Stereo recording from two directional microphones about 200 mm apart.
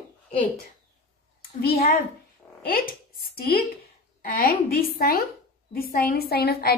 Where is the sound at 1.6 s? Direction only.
50° left (ahead or behind).